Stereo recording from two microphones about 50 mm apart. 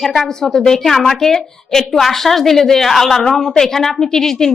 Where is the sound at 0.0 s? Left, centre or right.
Centre.